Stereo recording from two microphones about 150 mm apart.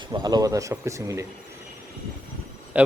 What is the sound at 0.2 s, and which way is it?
Speech, 25° right (ahead or behind).